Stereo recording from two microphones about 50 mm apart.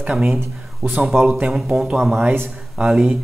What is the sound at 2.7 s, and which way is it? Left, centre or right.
Speech, centre.